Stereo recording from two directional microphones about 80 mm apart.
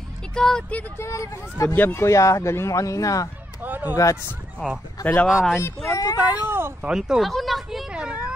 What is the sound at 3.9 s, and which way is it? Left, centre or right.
Speech, left.